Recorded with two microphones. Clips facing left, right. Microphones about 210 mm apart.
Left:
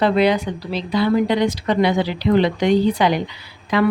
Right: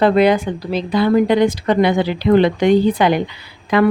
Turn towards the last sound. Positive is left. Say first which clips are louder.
# right 3 dB
turn(degrees=-55)  # may be behind; listen again after turning